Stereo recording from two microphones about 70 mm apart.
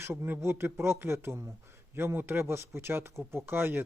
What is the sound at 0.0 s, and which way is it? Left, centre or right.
A man's voice, right.